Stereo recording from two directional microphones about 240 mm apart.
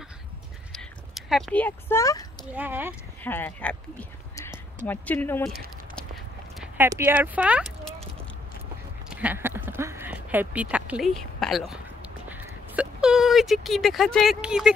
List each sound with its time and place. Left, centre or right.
0.7 s speech: centre
2.5 s speech: centre
3.3 s speech: centre
6.6 s speech: centre
9.1 s a sound: centre